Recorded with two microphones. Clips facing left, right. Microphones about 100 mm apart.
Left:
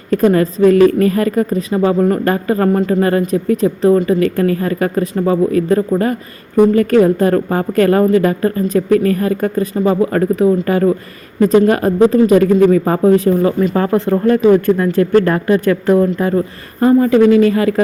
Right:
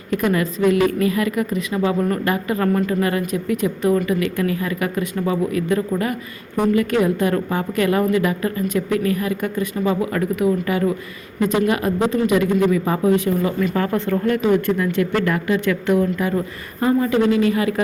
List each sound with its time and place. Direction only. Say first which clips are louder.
0.1 s a woman's voice: left 8 dB; 35° left (ahead or behind)
2.2 s a woman's voice: left 6 dB; 40° left (ahead or behind)
2.7 s a woman's voice: left 6 dB; 30° left (ahead or behind)